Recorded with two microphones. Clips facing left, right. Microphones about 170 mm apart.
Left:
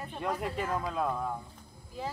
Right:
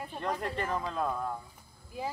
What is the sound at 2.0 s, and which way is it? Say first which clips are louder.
Speech: right 1 dB; 10° right (ahead or behind).